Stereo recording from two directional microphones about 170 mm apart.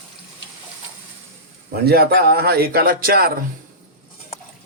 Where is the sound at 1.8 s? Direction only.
65° right (ahead or behind).